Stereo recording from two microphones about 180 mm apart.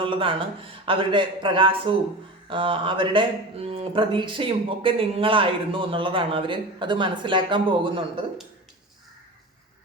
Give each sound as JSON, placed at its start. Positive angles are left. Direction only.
{"t": 0.0, "sound": "speech", "side_deg": -30}